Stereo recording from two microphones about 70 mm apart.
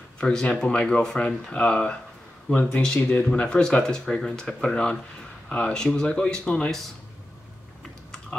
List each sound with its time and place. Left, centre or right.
0.5 s speech: centre
3.3 s speech: centre